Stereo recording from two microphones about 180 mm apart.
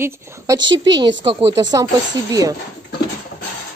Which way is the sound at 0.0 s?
15° right (ahead or behind).